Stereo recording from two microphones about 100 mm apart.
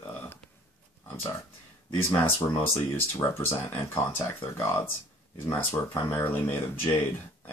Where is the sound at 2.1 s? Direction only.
30° left (ahead or behind).